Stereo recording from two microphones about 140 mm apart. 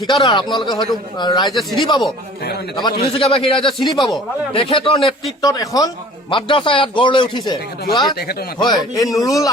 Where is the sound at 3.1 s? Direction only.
40° left (ahead or behind).